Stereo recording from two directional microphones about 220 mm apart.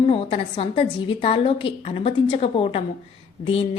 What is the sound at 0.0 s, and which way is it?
Speech, 25° left (ahead or behind).